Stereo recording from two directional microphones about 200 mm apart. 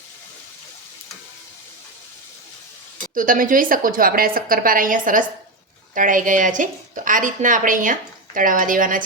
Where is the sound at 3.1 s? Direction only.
40° right (ahead or behind).